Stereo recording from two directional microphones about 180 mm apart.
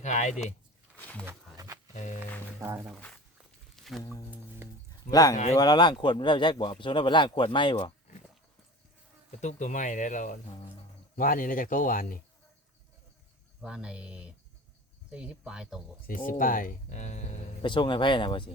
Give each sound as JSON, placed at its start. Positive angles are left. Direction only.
{"t": 0.0, "sound": "speech", "side_deg": 40}
{"t": 0.9, "sound": "wild animals", "side_deg": 10}
{"t": 1.5, "sound": "a sound", "side_deg": -20}
{"t": 1.9, "sound": "music", "side_deg": 40}
{"t": 2.6, "sound": "speech", "side_deg": -15}
{"t": 2.8, "sound": "speech", "side_deg": 0}
{"t": 3.8, "sound": "music", "side_deg": 0}
{"t": 5.1, "sound": "speech", "side_deg": 20}
{"t": 9.4, "sound": "speech", "side_deg": 40}
{"t": 13.6, "sound": "speech", "side_deg": -5}
{"t": 16.0, "sound": "speech", "side_deg": 50}
{"t": 17.6, "sound": "speech", "side_deg": 25}